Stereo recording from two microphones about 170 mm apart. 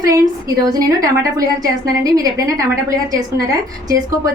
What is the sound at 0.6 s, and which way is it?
A woman's voice, 20° right (ahead or behind).